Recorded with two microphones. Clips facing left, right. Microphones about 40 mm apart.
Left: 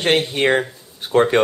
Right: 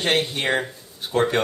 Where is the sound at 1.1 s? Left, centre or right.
Left.